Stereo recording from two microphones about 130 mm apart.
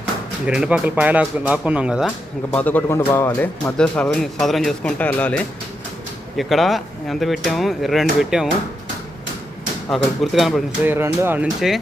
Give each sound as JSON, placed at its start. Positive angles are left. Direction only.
{"t": 0.4, "sound": "speech", "side_deg": -5}
{"t": 2.0, "sound": "speech", "side_deg": 10}
{"t": 6.3, "sound": "speech", "side_deg": 0}
{"t": 9.9, "sound": "speech", "side_deg": 0}
{"t": 10.8, "sound": "speech", "side_deg": -20}
{"t": 11.6, "sound": "speech", "side_deg": 0}